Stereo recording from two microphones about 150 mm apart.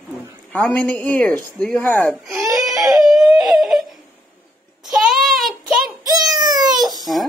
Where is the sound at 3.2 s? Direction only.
Centre (ahead or behind).